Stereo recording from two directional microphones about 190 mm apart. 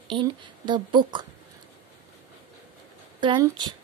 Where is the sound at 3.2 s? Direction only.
25° right (ahead or behind).